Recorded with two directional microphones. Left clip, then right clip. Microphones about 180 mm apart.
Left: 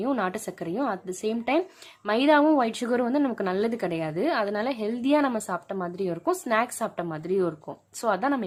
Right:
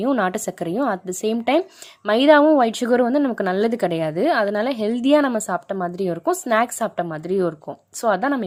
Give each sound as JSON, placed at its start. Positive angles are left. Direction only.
{"t": 0.0, "sound": "a woman's voice", "side_deg": -30}